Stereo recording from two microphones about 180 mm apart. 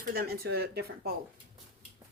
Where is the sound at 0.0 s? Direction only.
55° right (ahead or behind).